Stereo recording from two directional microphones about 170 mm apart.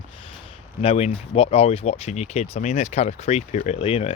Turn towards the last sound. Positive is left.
turn(degrees=35)  # may be behind; listen again after turning